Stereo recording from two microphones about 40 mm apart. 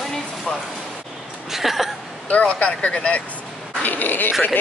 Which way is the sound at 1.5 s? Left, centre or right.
Centre.